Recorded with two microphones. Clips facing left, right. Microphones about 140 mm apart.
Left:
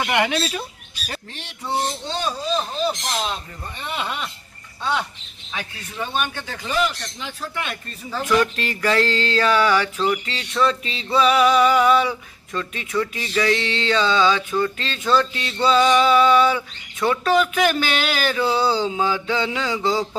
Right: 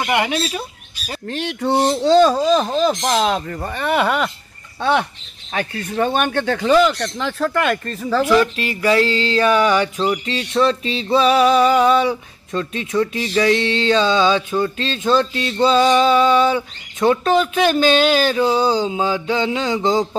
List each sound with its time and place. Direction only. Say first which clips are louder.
0.0 s speech: right 2 dB; 20° right (ahead or behind)
1.2 s speech: right 12 dB; 60° right (ahead or behind); by 2.9 s 90° right
3.0 s speech: right 9 dB; 75° right (ahead or behind)
5.5 s speech: right 9 dB; 50° right (ahead or behind); by 7.9 s 80° right
8.0 s speech: right 9 dB; 90° right
8.5 s a sound: right 4 dB; 10° right (ahead or behind)